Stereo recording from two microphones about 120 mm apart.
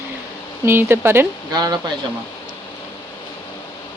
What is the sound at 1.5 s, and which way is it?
Speech, 35° right (ahead or behind).